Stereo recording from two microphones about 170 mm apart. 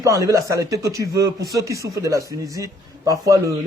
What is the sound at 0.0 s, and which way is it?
A man's voice, 20° right (ahead or behind).